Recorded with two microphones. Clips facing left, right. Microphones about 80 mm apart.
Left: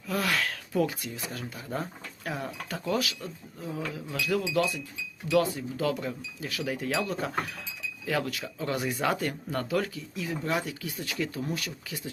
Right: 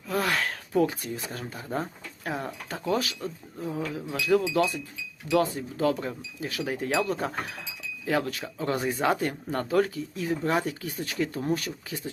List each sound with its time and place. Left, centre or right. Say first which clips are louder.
0.1 s speech: right 2 dB; right